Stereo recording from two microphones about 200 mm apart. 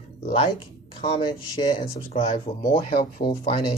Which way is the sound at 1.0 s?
25° left (ahead or behind).